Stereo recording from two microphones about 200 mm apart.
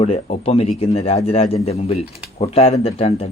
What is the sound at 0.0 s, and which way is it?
Speech, 30° left (ahead or behind).